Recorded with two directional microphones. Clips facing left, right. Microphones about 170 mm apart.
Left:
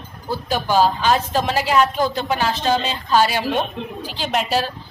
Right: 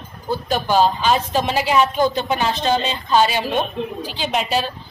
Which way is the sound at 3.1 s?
15° right (ahead or behind).